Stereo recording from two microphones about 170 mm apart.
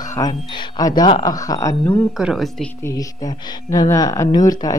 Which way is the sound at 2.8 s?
20° left (ahead or behind).